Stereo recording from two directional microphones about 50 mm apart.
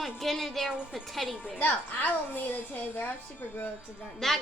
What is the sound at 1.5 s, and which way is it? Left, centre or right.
A woman's voice, left.